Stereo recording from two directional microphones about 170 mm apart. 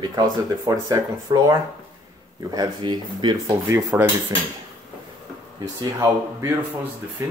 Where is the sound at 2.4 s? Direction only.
20° right (ahead or behind).